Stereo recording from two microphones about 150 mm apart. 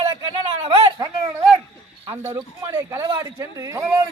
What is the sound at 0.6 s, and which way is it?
Speech, 40° right (ahead or behind).